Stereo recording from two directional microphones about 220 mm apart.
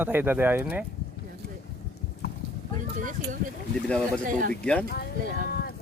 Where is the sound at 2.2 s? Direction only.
45° left (ahead or behind).